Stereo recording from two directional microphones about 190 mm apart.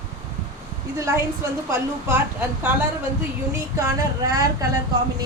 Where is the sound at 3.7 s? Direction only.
15° right (ahead or behind).